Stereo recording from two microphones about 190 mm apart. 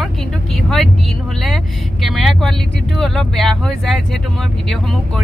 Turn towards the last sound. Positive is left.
turn(degrees=0)  # may be behind; listen again after turning